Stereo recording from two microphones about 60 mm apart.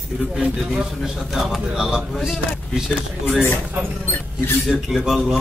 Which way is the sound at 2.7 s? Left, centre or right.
Centre.